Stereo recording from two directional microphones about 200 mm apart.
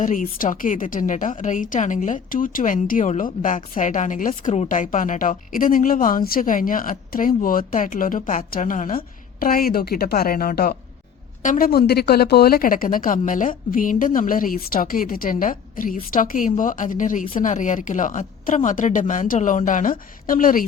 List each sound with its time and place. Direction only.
0.0 s a woman's voice: 40° left (ahead or behind)